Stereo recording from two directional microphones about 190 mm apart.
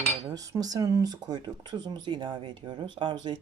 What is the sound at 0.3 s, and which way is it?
Speech, 20° right (ahead or behind).